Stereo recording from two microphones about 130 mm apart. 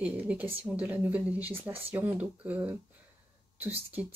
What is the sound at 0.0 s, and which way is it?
Speech, 10° right (ahead or behind).